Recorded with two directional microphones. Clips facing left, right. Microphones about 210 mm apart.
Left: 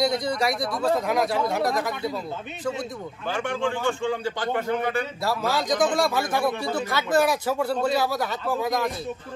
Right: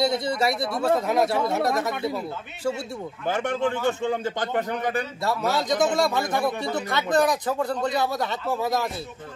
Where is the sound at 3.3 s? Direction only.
20° right (ahead or behind).